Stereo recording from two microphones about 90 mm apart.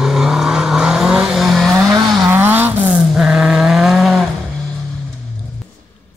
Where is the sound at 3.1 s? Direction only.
10° right (ahead or behind).